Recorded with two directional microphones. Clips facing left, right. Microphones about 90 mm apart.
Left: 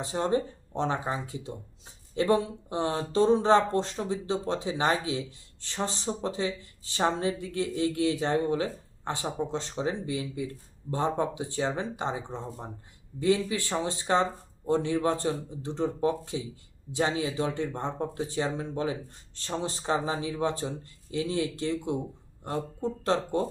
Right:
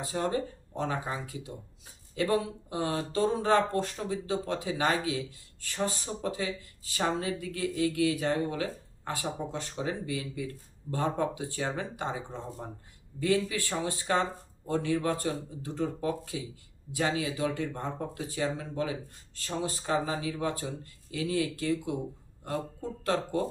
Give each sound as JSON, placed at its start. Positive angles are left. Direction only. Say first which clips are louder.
{"t": 0.0, "sound": "speech", "louder": "left 3 dB", "side_deg": 25}